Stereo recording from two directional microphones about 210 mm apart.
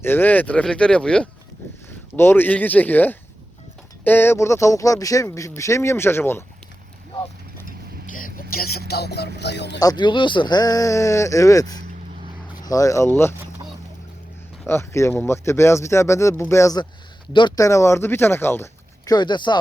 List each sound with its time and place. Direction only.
0.0 s speech: 10° left (ahead or behind)
8.1 s a sound: 40° left (ahead or behind)
8.9 s speech: 50° left (ahead or behind)
9.8 s speech: 20° left (ahead or behind)
14.7 s speech: 10° left (ahead or behind)